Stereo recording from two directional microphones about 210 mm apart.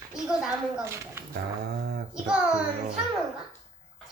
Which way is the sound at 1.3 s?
50° right (ahead or behind).